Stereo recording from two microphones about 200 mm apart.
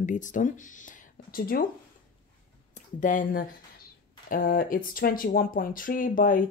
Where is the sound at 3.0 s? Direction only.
40° left (ahead or behind).